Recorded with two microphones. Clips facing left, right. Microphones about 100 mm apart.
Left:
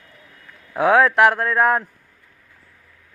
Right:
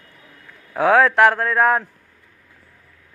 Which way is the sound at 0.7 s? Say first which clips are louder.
Even; centre (ahead or behind).